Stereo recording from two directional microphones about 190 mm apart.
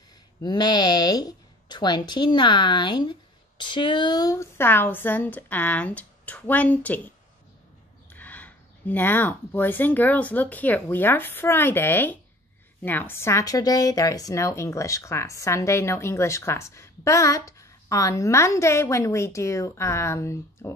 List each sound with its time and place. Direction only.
0.4 s speech: 20° left (ahead or behind)
8.1 s a woman's voice: 10° left (ahead or behind)